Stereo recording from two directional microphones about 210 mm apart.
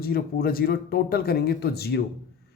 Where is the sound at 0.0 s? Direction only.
45° left (ahead or behind).